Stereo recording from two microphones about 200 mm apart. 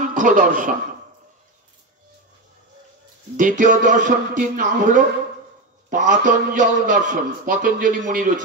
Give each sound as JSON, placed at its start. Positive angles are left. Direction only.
{"t": 0.1, "sound": "a man's voice", "side_deg": -40}
{"t": 3.3, "sound": "a man's voice", "side_deg": -40}